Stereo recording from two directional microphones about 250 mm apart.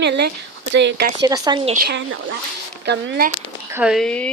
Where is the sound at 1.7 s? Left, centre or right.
Right.